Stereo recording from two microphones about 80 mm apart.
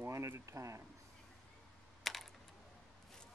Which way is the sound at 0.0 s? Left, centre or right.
Right.